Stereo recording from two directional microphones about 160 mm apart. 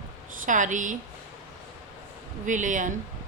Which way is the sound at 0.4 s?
50° right (ahead or behind).